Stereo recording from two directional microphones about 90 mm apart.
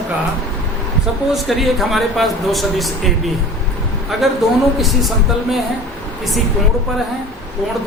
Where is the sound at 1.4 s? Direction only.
Centre (ahead or behind).